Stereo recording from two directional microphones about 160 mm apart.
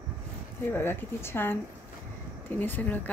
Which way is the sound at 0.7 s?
15° left (ahead or behind).